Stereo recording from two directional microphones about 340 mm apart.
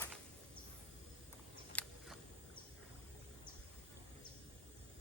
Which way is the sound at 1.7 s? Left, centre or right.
Centre.